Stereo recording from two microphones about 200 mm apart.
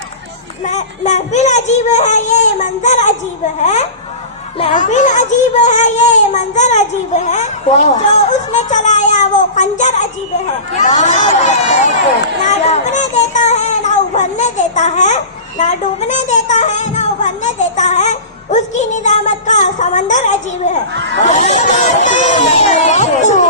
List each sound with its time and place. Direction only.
0.6 s a child's voice: 35° left (ahead or behind)
12.5 s music: 35° left (ahead or behind)
20.9 s speech: 60° right (ahead or behind)
21.2 s a child's voice: 35° left (ahead or behind)